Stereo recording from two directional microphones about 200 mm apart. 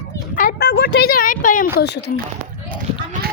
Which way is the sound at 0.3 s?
50° left (ahead or behind).